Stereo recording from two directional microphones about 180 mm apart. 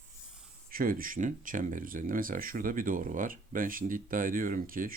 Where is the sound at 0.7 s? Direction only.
55° right (ahead or behind).